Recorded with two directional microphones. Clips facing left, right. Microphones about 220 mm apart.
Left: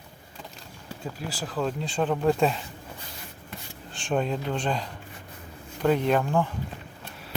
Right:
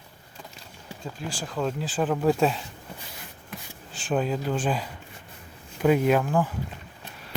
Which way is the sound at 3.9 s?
5° right (ahead or behind).